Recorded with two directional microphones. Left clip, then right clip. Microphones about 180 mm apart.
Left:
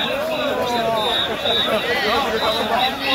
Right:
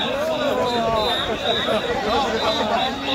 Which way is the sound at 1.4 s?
55° left (ahead or behind).